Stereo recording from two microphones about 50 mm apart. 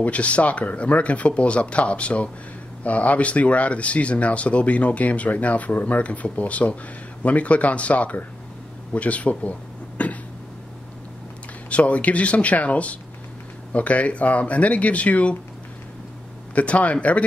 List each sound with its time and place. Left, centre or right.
0.0 s speech: left
11.7 s speech: left
16.5 s speech: left